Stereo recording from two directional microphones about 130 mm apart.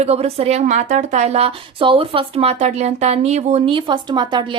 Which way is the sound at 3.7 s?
35° right (ahead or behind).